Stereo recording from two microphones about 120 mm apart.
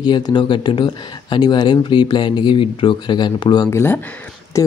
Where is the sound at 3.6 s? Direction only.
20° left (ahead or behind).